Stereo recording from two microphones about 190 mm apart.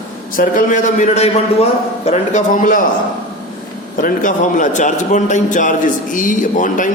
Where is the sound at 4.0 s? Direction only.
45° left (ahead or behind).